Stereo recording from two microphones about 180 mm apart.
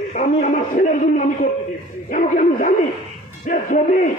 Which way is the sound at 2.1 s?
45° left (ahead or behind).